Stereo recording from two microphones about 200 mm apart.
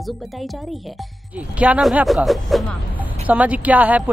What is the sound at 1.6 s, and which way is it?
Speech, 5° right (ahead or behind).